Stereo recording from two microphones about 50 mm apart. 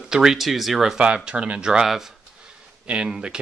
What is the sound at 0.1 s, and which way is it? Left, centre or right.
Speech, centre.